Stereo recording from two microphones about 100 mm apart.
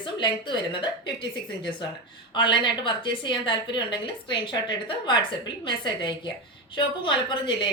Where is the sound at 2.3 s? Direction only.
55° left (ahead or behind).